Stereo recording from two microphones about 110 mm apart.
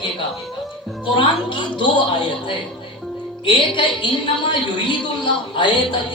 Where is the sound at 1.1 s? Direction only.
50° left (ahead or behind).